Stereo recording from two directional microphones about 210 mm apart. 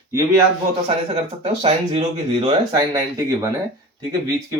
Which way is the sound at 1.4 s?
30° right (ahead or behind).